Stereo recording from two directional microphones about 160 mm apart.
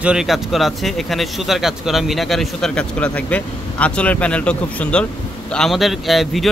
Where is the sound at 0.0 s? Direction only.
5° right (ahead or behind).